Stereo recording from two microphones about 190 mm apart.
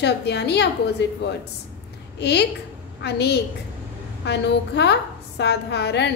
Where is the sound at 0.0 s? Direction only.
65° left (ahead or behind).